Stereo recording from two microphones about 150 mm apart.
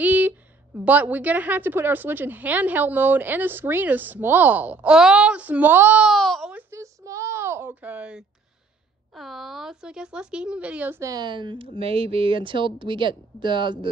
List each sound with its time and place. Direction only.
0.0 s a woman's voice: 10° right (ahead or behind)
6.5 s a sound: 20° right (ahead or behind)
9.1 s speech: centre (ahead or behind); by 13.8 s 30° right (ahead or behind)